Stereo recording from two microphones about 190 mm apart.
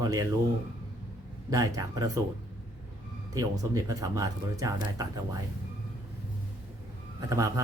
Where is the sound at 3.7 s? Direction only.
20° right (ahead or behind).